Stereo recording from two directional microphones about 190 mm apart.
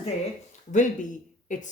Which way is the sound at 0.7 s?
40° left (ahead or behind).